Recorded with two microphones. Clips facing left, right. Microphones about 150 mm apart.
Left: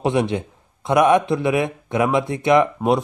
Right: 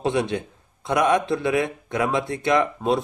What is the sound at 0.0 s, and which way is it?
Speech, 20° left (ahead or behind).